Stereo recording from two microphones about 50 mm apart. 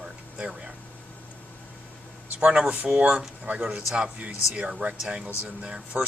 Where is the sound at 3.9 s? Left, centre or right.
Right.